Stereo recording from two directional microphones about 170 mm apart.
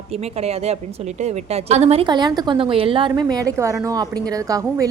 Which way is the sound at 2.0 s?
25° right (ahead or behind).